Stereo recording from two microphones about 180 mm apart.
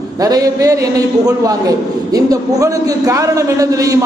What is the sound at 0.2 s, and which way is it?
A man's voice, 20° right (ahead or behind).